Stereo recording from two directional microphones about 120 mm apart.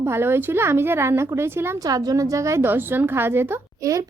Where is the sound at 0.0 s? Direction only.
20° right (ahead or behind).